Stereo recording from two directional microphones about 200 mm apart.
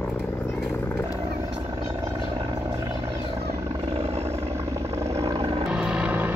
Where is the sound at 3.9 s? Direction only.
30° right (ahead or behind).